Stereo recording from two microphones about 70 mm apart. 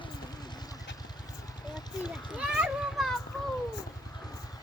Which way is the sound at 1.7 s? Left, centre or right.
Left.